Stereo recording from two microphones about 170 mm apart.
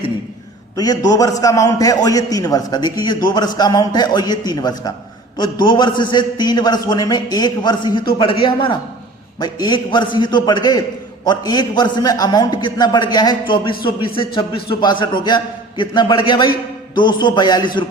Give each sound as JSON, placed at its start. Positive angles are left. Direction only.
{"t": 0.8, "sound": "a man's voice", "side_deg": 20}